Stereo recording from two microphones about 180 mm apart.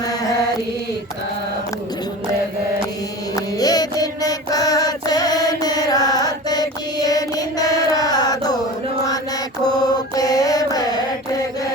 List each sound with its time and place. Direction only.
0.0 s mantra: 20° left (ahead or behind)
3.3 s mantra: 20° left (ahead or behind)
10.2 s mantra: 20° left (ahead or behind)